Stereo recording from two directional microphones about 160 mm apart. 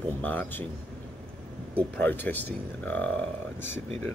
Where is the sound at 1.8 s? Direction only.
10° left (ahead or behind).